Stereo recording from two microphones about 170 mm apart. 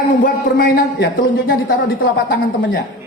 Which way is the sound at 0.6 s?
65° left (ahead or behind).